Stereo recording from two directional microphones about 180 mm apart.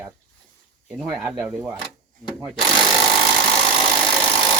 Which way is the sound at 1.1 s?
5° right (ahead or behind).